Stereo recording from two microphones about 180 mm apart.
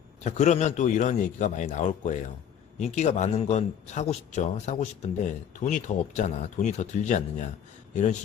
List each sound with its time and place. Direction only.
0.3 s a man's voice: 40° left (ahead or behind)